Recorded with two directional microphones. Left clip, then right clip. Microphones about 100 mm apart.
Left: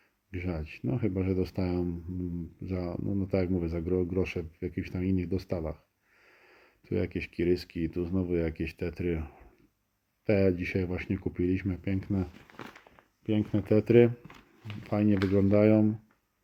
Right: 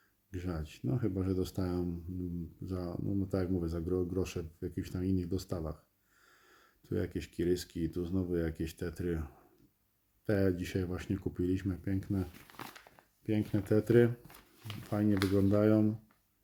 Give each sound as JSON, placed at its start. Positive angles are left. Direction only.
{"t": 0.3, "sound": "speech", "side_deg": 0}
{"t": 12.3, "sound": "speech", "side_deg": 45}
{"t": 13.2, "sound": "speech", "side_deg": 10}
{"t": 15.0, "sound": "speech", "side_deg": 40}
{"t": 15.5, "sound": "speech", "side_deg": 5}